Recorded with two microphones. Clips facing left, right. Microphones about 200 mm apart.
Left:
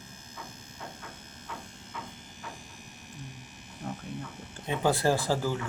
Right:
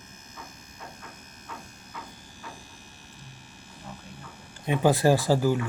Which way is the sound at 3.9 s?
40° left (ahead or behind).